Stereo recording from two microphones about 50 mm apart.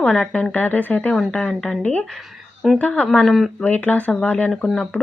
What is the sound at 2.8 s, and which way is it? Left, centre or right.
Speech, left.